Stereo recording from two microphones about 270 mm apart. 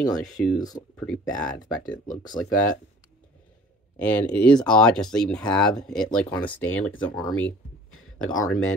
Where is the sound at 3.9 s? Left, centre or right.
Centre.